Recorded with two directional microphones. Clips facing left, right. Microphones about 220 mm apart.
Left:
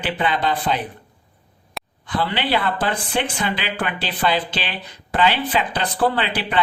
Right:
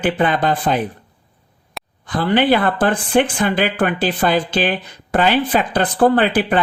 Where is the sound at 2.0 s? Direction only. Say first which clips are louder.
Right 8 dB; 45° right (ahead or behind).